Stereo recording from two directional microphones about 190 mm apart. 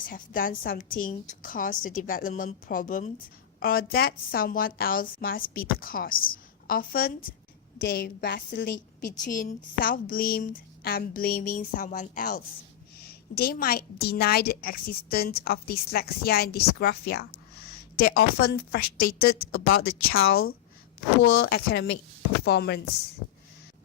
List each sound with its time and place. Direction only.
0.1 s a woman's voice: 45° left (ahead or behind)
7.8 s a woman's voice: 60° left (ahead or behind)
9.2 s a woman's voice: 45° left (ahead or behind)
19.5 s speech: 90° left
20.1 s a woman's voice: 55° left (ahead or behind)
21.2 s a woman's voice: 90° left; by 22.8 s 60° left (ahead or behind)